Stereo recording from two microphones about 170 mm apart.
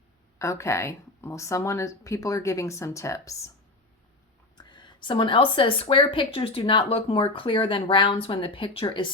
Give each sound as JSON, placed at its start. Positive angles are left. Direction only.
{"t": 0.3, "sound": "speech", "side_deg": 15}
{"t": 4.5, "sound": "a woman's voice", "side_deg": 25}